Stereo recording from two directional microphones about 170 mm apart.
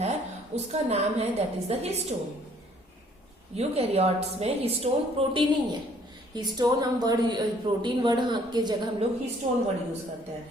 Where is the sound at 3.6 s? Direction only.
35° right (ahead or behind).